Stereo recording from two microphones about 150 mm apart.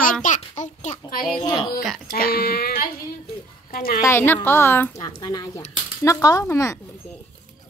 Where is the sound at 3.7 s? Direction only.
80° left.